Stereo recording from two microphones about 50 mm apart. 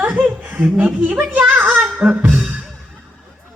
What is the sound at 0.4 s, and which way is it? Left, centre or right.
Chuckle, right.